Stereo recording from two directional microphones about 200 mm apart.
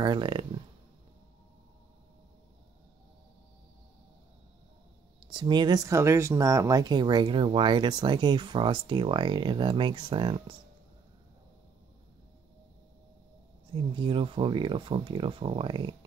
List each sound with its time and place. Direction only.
0.0 s speech: 25° right (ahead or behind)
5.2 s speech: 25° right (ahead or behind)
13.7 s speech: 25° right (ahead or behind)